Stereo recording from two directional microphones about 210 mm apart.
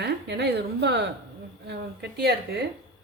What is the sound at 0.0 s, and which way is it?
Speech, 55° right (ahead or behind).